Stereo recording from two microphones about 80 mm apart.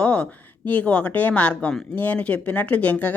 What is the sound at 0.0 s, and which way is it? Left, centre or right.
Speech, centre.